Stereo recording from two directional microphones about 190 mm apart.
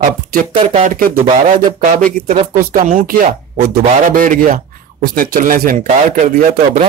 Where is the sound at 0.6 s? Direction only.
40° right (ahead or behind).